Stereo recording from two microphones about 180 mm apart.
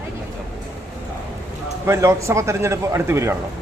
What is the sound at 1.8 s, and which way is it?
A man's voice, 15° right (ahead or behind).